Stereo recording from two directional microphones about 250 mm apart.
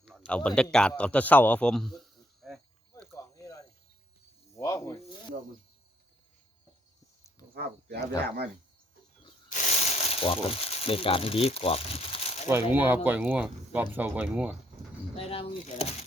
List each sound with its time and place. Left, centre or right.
0.0 s a man's voice: centre
3.0 s snake: centre
7.5 s speech: right
9.5 s speech: left
12.5 s speech: centre
15.1 s speech: left